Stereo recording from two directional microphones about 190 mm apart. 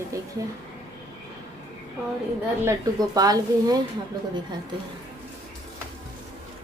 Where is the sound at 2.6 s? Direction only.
20° right (ahead or behind).